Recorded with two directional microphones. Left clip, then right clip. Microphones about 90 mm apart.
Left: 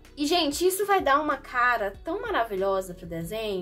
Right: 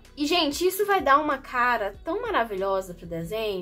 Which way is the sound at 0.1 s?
35° right (ahead or behind).